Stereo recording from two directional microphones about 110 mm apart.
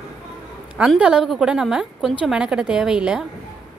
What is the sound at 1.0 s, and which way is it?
A woman's voice, 5° right (ahead or behind).